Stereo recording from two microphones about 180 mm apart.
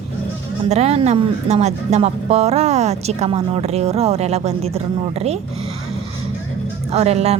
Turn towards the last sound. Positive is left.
turn(degrees=-35)  # may be behind; listen again after turning